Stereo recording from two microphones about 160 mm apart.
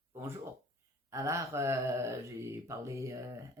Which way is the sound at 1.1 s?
20° right (ahead or behind).